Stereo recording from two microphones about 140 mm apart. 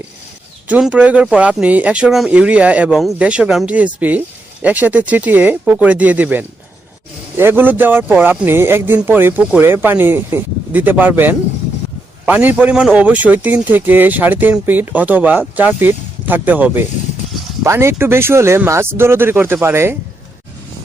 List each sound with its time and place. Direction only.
0.7 s a man's voice: 10° right (ahead or behind)